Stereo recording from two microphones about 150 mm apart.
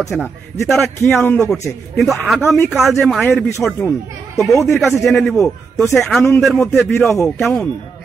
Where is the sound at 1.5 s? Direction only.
Centre (ahead or behind).